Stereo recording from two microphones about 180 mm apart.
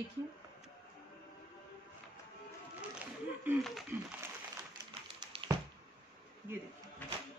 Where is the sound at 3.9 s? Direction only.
15° right (ahead or behind).